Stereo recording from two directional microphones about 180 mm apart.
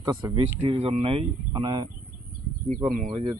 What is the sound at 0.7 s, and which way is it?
Speech, 30° right (ahead or behind).